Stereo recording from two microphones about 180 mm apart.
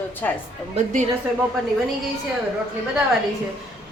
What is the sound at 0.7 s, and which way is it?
Speech, 40° right (ahead or behind).